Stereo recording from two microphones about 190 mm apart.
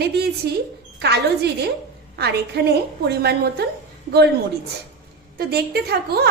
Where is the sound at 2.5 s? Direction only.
60° right (ahead or behind).